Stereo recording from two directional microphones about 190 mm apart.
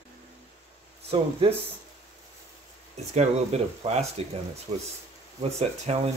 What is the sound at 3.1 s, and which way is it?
Speech, 35° right (ahead or behind).